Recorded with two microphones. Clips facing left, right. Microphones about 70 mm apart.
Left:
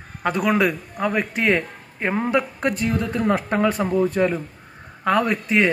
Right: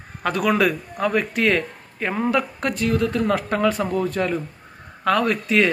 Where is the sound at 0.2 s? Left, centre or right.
Centre.